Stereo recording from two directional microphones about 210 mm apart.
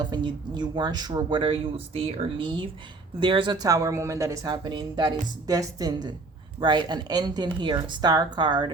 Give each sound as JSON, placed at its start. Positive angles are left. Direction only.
{"t": 0.0, "sound": "speech", "side_deg": -20}